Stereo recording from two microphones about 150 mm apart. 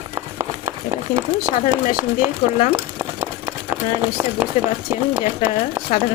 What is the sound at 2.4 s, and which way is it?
Speech, 35° left (ahead or behind).